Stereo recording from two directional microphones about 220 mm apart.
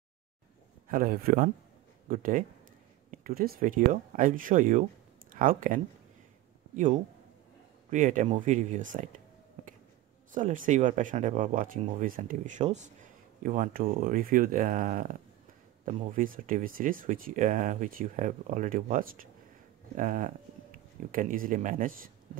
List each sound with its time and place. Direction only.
0.8 s a man's voice: 40° right (ahead or behind)
10.3 s speech: 35° right (ahead or behind)